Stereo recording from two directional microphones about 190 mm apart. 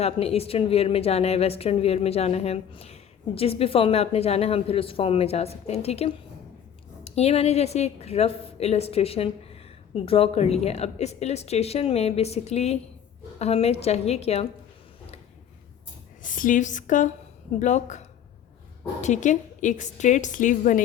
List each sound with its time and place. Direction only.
0.0 s speech: 30° left (ahead or behind)
16.2 s speech: 45° left (ahead or behind)
19.0 s speech: 40° left (ahead or behind)